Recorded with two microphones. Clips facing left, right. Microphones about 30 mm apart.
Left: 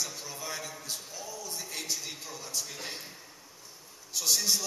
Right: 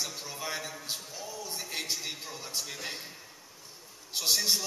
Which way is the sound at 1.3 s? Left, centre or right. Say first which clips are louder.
Right 2 dB; right.